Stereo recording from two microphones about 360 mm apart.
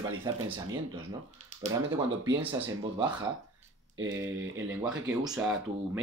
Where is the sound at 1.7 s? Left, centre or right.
Centre.